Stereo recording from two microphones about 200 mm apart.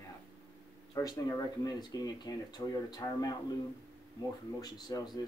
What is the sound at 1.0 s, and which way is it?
Speech, 20° left (ahead or behind).